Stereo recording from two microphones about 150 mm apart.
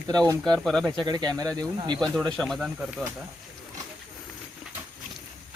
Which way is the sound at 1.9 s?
5° left (ahead or behind).